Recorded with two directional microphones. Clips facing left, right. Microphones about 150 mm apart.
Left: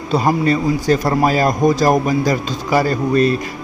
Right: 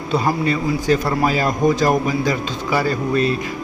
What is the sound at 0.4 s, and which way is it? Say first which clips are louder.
A man's voice: left 3 dB; 40° left (ahead or behind).